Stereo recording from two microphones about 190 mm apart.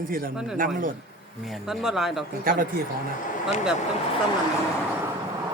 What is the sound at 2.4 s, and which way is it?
Speech, 50° right (ahead or behind).